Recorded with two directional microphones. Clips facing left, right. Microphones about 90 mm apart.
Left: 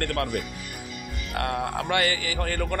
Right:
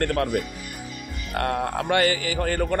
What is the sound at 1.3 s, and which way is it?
Speech, 35° right (ahead or behind).